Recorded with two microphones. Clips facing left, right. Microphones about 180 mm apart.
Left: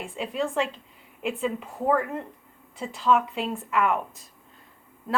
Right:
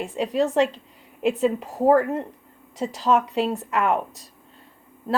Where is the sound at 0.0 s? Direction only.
40° right (ahead or behind).